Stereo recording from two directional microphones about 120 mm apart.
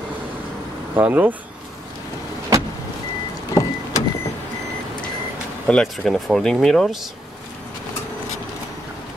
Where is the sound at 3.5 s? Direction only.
30° left (ahead or behind).